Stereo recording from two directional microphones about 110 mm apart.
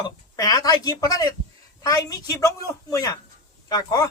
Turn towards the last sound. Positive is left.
turn(degrees=30)  # may be behind; listen again after turning